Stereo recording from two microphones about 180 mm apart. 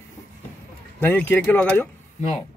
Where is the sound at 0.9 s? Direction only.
10° left (ahead or behind).